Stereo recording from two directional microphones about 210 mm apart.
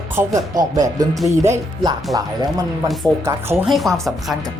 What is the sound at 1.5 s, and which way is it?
Speech, 20° right (ahead or behind).